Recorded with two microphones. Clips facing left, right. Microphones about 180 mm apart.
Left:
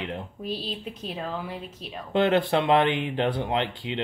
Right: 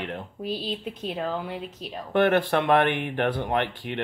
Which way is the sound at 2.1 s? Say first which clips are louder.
Right 1 dB; 20° left (ahead or behind).